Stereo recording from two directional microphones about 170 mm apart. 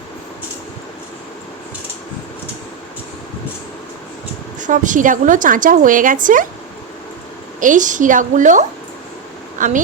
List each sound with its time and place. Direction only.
4.6 s a woman's voice: 50° right (ahead or behind)
7.6 s a woman's voice: 50° right (ahead or behind)